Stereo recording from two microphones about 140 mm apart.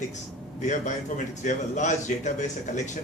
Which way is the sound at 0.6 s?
60° left (ahead or behind).